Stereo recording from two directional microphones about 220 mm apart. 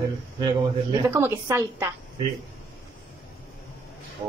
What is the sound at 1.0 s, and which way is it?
Speech, 10° right (ahead or behind).